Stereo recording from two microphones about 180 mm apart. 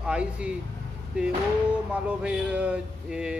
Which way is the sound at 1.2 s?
5° right (ahead or behind).